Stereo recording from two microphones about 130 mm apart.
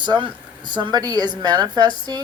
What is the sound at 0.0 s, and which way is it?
Speech, 35° right (ahead or behind).